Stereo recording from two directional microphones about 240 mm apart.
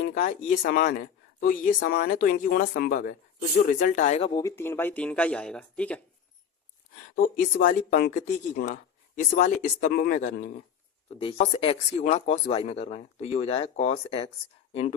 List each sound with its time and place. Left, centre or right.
0.1 s speech: left; by 6.0 s centre
7.2 s speech: left
11.2 s speech: left